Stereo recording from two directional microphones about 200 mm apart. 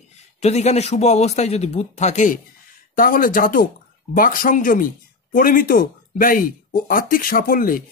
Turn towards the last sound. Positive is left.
turn(degrees=45)  # may be behind; listen again after turning